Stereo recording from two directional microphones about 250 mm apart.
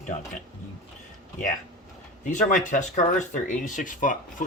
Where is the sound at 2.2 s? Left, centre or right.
Left.